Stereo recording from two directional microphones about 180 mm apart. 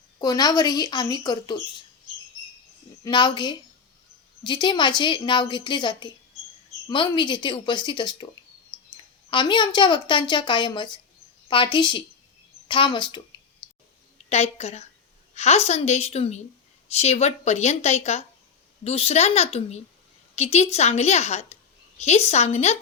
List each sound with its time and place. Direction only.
0.2 s a woman's voice: 20° left (ahead or behind)
3.0 s a woman's voice: 25° left (ahead or behind)
14.3 s a woman's voice: 35° left (ahead or behind)